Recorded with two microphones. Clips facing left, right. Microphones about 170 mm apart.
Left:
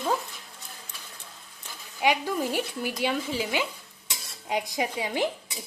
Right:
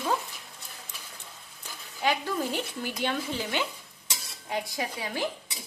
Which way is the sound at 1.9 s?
15° left (ahead or behind).